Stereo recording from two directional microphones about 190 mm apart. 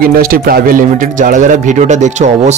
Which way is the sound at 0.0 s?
50° right (ahead or behind).